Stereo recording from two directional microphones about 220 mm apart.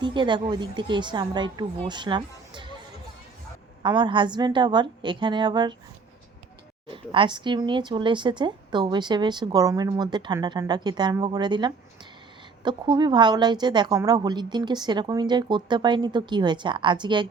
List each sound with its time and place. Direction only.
0.0 s speech: 20° right (ahead or behind)
3.8 s speech: 20° right (ahead or behind)
6.8 s speech: 25° right (ahead or behind)